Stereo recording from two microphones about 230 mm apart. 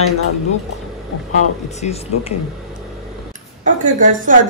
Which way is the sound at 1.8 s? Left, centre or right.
Left.